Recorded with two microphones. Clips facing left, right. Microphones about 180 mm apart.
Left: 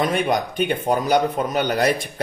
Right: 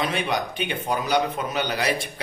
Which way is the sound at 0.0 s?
45° left (ahead or behind).